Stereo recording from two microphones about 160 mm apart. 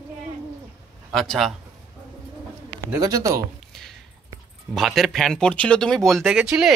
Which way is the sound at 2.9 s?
20° right (ahead or behind).